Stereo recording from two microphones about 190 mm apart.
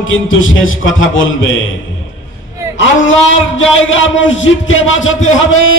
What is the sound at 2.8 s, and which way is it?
A man's voice, 85° left.